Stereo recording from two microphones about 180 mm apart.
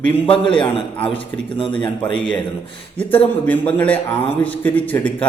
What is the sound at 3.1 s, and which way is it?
A man's voice, 10° left (ahead or behind).